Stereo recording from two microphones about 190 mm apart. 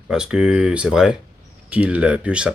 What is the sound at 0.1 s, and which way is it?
Speech, 5° right (ahead or behind).